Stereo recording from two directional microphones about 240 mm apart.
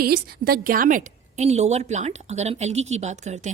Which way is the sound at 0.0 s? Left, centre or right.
Right.